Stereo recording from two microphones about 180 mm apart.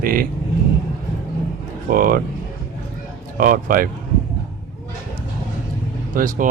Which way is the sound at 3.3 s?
50° right (ahead or behind).